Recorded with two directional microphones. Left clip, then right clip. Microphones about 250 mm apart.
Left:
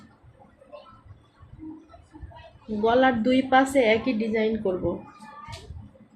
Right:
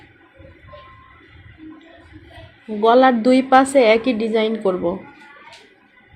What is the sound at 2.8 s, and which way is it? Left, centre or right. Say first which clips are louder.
A woman's voice: right 8 dB; right.